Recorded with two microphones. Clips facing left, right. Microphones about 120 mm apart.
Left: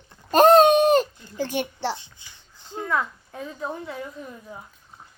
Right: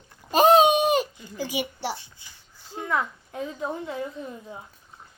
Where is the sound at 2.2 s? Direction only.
20° left (ahead or behind).